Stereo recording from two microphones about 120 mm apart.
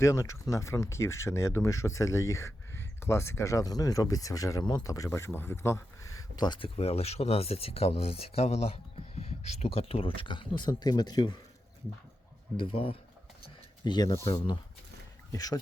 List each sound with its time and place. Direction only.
0.0 s speech: 25° left (ahead or behind)
6.3 s speech: 40° left (ahead or behind)
6.7 s speech: 60° left (ahead or behind); by 11.3 s 35° left (ahead or behind)
12.5 s speech: 50° left (ahead or behind)
13.8 s speech: 40° left (ahead or behind)
15.3 s speech: 30° left (ahead or behind)